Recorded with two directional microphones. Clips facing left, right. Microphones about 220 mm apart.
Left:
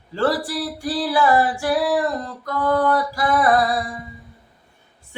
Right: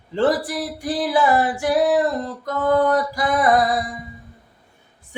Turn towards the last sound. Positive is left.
turn(degrees=-20)  # may be behind; listen again after turning